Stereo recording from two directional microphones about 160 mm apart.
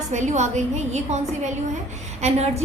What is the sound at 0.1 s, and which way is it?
A woman's voice, 45° right (ahead or behind).